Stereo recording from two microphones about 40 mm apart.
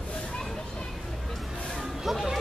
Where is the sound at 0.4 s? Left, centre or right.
Centre.